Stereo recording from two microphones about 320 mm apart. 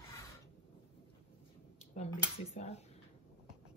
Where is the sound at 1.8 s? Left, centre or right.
Centre.